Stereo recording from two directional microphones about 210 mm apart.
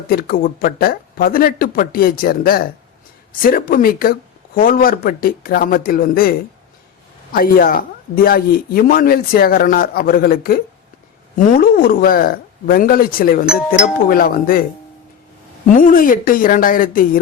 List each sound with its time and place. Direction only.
0.1 s speech: 45° left (ahead or behind)
7.3 s speech: 45° left (ahead or behind)
15.7 s speech: 40° left (ahead or behind)